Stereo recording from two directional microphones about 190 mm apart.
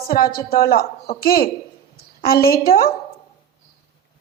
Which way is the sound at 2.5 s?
50° left (ahead or behind).